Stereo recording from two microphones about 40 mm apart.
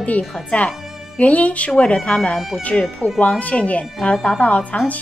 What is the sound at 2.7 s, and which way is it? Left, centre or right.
Speech, centre.